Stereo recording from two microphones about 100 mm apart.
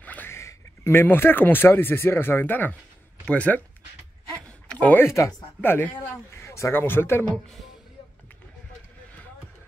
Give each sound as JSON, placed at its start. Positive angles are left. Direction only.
{"t": 0.0, "sound": "speech", "side_deg": 15}
{"t": 4.6, "sound": "a sound", "side_deg": 15}
{"t": 5.0, "sound": "speech", "side_deg": 30}